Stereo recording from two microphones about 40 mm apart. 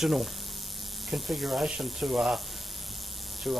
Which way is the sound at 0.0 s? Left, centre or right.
Centre.